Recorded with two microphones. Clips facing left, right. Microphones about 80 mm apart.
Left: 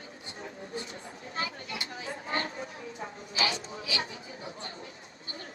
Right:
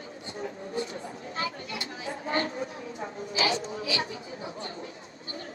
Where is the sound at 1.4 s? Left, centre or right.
Right.